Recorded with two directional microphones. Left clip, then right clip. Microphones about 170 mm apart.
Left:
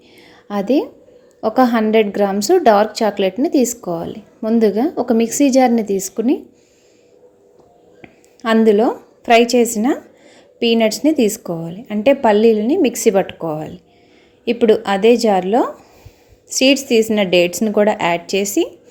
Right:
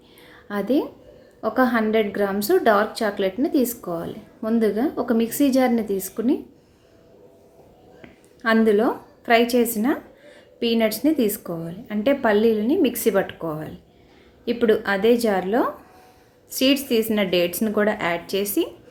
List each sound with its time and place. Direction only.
0.2 s a sound: 30° left (ahead or behind)
1.4 s a woman's voice: 35° left (ahead or behind)
8.0 s a woman's voice: 30° left (ahead or behind)